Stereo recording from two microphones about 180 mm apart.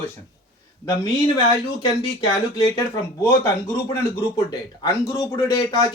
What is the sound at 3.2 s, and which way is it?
Speech, 15° left (ahead or behind).